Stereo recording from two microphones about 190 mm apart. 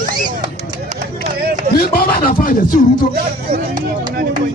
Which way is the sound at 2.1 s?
50° left (ahead or behind).